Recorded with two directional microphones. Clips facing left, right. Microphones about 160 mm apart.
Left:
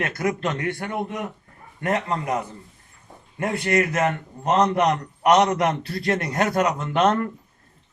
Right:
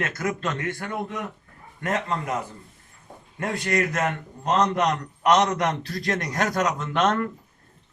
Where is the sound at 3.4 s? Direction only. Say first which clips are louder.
Left 3 dB; 25° left (ahead or behind).